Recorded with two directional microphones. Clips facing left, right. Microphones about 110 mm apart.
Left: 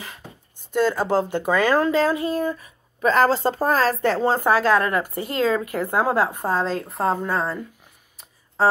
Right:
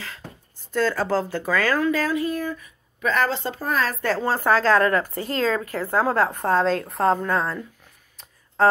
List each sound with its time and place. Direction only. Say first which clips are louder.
0.7 s speech: left 2 dB; 15° left (ahead or behind)
6.5 s a woman's voice: right 3 dB; centre (ahead or behind)